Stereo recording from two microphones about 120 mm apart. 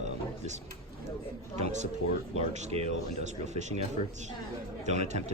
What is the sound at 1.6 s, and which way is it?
A man's voice, 70° right (ahead or behind).